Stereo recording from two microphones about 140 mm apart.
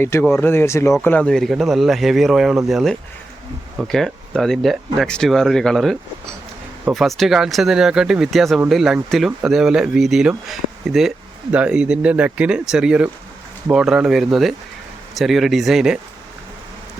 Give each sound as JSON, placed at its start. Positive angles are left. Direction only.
{"t": 0.0, "sound": "speech", "side_deg": 15}
{"t": 1.0, "sound": "speech", "side_deg": 10}